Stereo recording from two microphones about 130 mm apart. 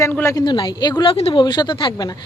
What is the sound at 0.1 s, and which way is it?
Speech, 15° left (ahead or behind).